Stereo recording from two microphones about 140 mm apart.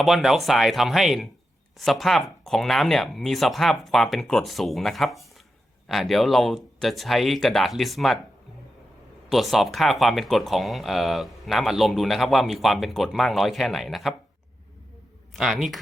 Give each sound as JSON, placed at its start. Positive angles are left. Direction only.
{"t": 0.0, "sound": "speech", "side_deg": 0}
{"t": 9.3, "sound": "speech", "side_deg": 0}
{"t": 15.4, "sound": "speech", "side_deg": -5}